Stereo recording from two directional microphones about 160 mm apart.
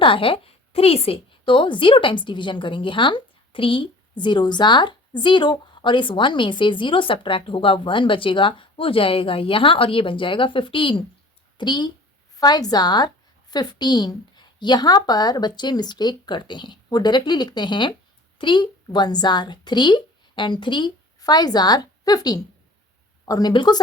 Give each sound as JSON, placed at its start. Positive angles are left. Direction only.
{"t": 0.0, "sound": "a woman's voice", "side_deg": 35}